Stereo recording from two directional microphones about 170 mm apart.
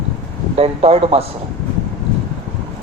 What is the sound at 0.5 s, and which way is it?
Speech, 35° right (ahead or behind).